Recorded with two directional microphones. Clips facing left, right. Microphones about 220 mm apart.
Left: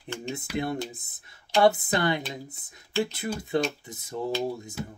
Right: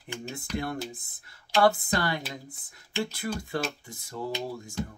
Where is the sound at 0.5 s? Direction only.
5° left (ahead or behind).